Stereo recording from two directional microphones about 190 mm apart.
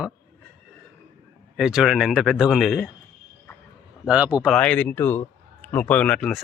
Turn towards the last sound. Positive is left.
turn(degrees=5)  # may be behind; listen again after turning